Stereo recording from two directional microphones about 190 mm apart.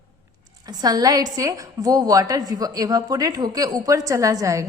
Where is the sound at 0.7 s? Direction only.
20° right (ahead or behind).